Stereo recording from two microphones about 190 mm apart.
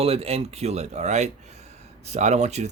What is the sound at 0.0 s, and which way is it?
Speech, 30° right (ahead or behind).